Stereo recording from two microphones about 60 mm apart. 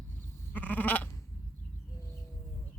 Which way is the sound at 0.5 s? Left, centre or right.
Left.